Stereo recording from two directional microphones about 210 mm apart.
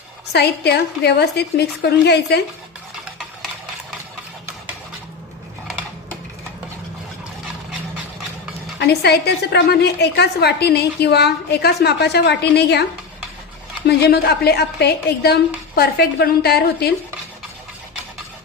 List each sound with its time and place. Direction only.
0.3 s a woman's voice: 50° left (ahead or behind)
8.8 s a woman's voice: 50° left (ahead or behind)
13.8 s a woman's voice: 50° left (ahead or behind)